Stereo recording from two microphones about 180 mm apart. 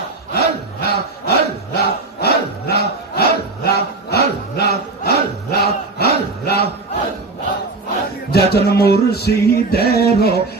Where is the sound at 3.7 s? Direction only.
60° left (ahead or behind).